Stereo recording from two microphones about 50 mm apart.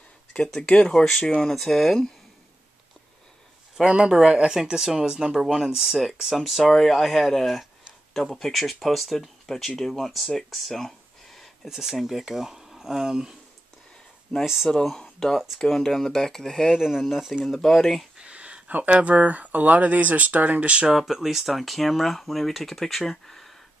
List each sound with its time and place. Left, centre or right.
0.6 s speech: left
1.4 s speech: centre
3.8 s speech: centre
11.7 s speech: centre
14.4 s speech: centre
14.7 s speech: centre
15.3 s speech: centre
15.6 s speech: centre
16.7 s speech: centre
18.1 s speech: right
20.9 s speech: centre